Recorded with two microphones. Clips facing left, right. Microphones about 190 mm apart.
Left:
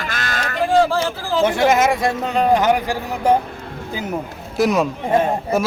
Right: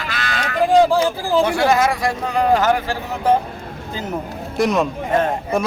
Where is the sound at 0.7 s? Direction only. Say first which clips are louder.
Right 3 dB; 15° right (ahead or behind).